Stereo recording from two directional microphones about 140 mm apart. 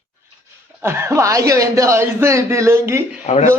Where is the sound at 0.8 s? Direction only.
15° right (ahead or behind).